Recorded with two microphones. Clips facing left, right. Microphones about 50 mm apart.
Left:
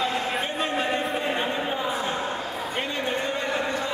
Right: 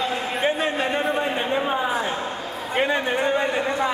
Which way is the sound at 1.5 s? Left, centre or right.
Centre.